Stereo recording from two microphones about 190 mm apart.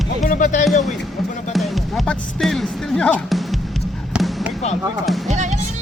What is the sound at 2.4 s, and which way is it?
Music, centre (ahead or behind).